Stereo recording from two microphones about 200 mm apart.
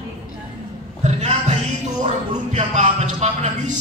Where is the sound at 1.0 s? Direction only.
35° right (ahead or behind).